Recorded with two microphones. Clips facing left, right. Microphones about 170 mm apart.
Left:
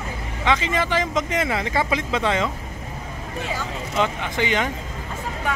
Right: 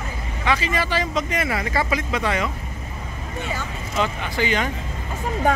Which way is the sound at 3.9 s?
20° left (ahead or behind).